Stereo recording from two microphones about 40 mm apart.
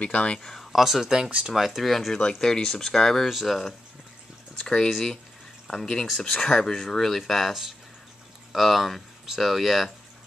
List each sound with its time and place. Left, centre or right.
0.0 s speech: left
0.4 s speech: centre
0.7 s speech: centre
2.4 s speech: centre
3.3 s speech: centre
4.6 s speech: centre
8.5 s speech: centre